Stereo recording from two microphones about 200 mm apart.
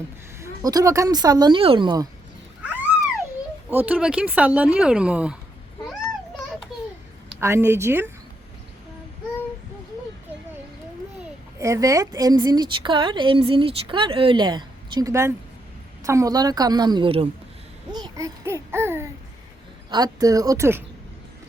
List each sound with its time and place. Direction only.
0.3 s a woman's voice: 15° right (ahead or behind)
2.6 s a sound: 10° right (ahead or behind)
3.7 s speech: 10° right (ahead or behind)
6.7 s a sound: centre (ahead or behind)
7.3 s speech: 10° right (ahead or behind)
11.6 s a woman's voice: 15° right (ahead or behind)